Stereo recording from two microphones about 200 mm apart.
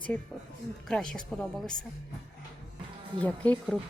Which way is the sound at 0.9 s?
5° left (ahead or behind).